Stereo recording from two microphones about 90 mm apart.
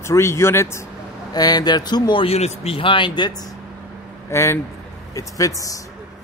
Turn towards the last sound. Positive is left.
turn(degrees=40)  # may be behind; listen again after turning